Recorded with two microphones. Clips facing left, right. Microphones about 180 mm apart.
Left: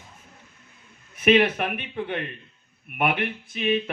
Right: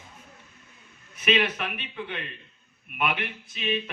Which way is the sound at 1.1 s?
50° left (ahead or behind).